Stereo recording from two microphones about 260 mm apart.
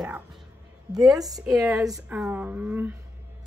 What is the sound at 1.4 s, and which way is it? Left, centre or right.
Speech, centre.